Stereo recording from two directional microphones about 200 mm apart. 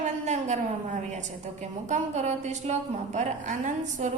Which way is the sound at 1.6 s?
35° right (ahead or behind).